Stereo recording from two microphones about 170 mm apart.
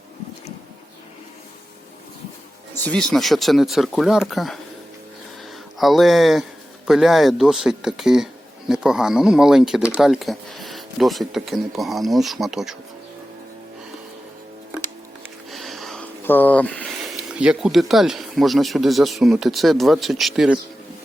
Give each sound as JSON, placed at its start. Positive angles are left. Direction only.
{"t": 2.8, "sound": "speech", "side_deg": 5}
{"t": 5.8, "sound": "speech", "side_deg": 0}
{"t": 15.4, "sound": "a sound", "side_deg": 0}
{"t": 16.2, "sound": "speech", "side_deg": 10}
{"t": 17.3, "sound": "speech", "side_deg": -5}